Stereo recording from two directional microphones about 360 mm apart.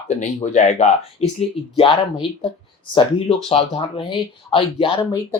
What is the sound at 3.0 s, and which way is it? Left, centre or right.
Speech, centre.